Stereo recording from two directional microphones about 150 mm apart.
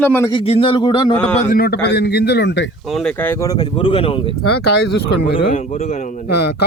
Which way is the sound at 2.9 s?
5° left (ahead or behind).